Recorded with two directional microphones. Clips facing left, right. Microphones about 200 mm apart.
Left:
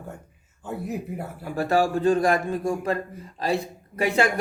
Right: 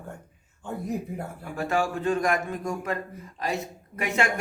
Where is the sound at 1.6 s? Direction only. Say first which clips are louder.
Left 5 dB; 35° left (ahead or behind).